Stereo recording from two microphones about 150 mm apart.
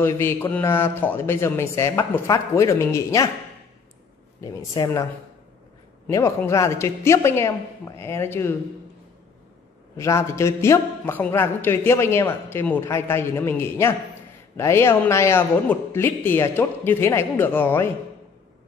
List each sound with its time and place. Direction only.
0.0 s a man's voice: 15° left (ahead or behind)
4.4 s speech: 20° left (ahead or behind)
6.0 s a man's voice: 20° left (ahead or behind)
9.9 s a man's voice: 20° left (ahead or behind)